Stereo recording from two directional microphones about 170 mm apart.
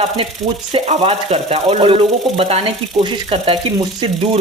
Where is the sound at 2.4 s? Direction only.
35° right (ahead or behind).